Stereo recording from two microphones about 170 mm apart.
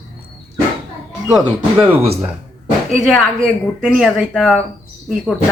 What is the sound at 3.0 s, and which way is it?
Speech, centre (ahead or behind).